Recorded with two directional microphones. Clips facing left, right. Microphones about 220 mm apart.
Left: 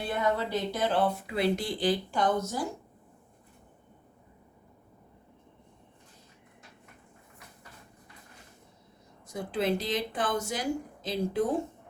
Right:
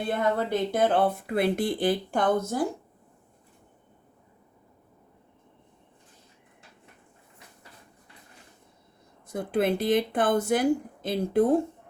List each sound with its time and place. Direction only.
0.1 s speech: 50° right (ahead or behind)
9.2 s speech: 55° right (ahead or behind)